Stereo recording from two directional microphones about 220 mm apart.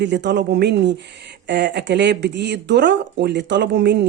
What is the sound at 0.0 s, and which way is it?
Speech, 50° right (ahead or behind).